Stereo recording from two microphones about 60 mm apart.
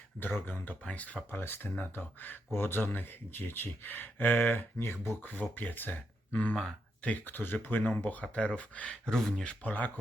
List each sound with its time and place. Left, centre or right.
0.2 s speech: left
1.4 s speech: left
7.3 s speech: left
9.0 s speech: centre
9.5 s speech: left